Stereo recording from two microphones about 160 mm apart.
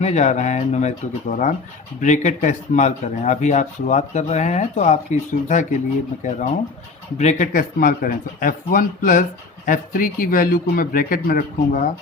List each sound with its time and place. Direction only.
0.0 s speech: 45° left (ahead or behind)
7.2 s speech: 50° left (ahead or behind)